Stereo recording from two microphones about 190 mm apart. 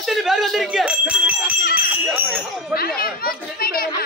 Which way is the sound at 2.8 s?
50° left (ahead or behind).